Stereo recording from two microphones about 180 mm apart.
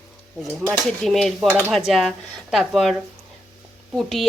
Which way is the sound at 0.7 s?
Centre (ahead or behind).